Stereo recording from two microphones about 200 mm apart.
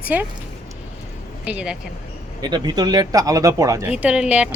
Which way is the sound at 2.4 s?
20° right (ahead or behind).